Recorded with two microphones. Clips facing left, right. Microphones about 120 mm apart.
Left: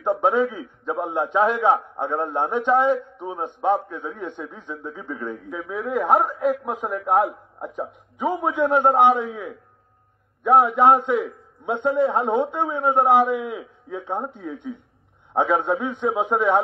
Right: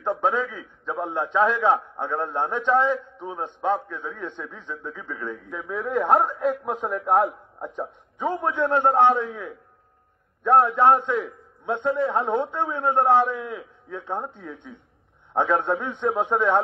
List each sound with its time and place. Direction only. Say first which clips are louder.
0.0 s a man's voice: left 4 dB; 15° left (ahead or behind)
5.5 s a man's voice: even; 5° left (ahead or behind)